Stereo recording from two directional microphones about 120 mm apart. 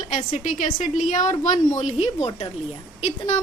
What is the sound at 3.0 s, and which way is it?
Speech, 60° left (ahead or behind).